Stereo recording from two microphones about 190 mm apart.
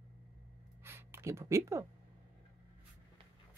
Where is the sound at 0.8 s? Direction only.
15° right (ahead or behind).